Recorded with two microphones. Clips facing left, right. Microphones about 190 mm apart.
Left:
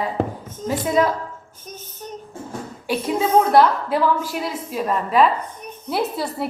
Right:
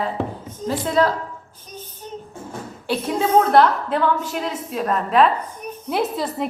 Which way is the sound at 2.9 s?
15° left (ahead or behind).